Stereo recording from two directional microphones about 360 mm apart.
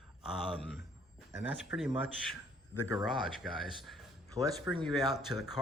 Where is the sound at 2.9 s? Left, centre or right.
Centre.